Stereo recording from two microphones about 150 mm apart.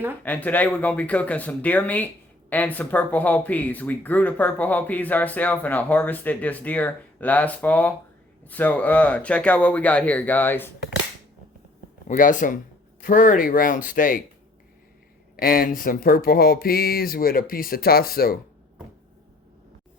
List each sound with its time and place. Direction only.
0.2 s speech: 10° left (ahead or behind)
12.0 s speech: 60° left (ahead or behind)
15.4 s speech: 75° left (ahead or behind)